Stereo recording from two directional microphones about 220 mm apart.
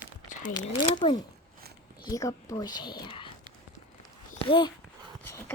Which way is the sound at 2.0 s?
15° left (ahead or behind).